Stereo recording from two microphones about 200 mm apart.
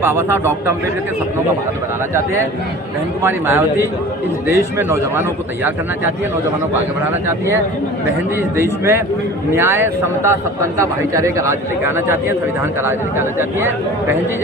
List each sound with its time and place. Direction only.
0.0 s a man's voice: 10° right (ahead or behind)
3.2 s a man's voice: 10° right (ahead or behind)
7.3 s a man's voice: 15° right (ahead or behind)